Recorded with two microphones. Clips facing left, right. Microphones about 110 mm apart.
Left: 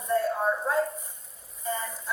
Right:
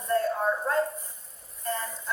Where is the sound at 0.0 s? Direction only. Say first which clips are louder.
Even; centre (ahead or behind).